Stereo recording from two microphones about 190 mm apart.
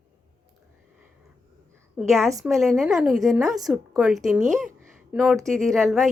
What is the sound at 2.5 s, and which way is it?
A woman's voice, centre (ahead or behind).